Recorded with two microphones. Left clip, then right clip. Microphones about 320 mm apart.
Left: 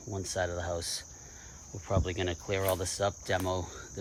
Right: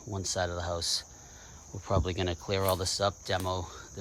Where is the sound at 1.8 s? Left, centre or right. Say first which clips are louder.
Right 1 dB; centre.